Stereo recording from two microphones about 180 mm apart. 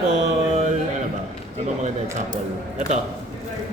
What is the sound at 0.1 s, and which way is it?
Mantra, 40° right (ahead or behind).